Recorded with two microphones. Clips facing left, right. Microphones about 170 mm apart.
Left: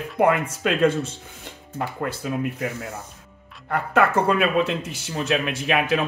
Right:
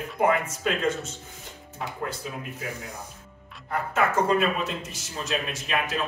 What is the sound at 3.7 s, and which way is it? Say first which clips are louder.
Speech: left 5 dB; 65° left (ahead or behind).